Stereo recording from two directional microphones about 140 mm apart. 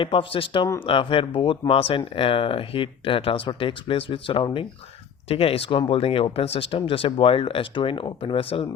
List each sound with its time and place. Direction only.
0.0 s speech: 40° left (ahead or behind)